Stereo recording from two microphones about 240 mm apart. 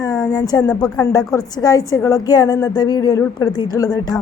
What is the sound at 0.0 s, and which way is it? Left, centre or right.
A woman's voice, centre.